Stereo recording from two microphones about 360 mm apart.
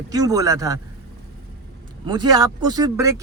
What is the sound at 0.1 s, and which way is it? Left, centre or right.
Speech, centre.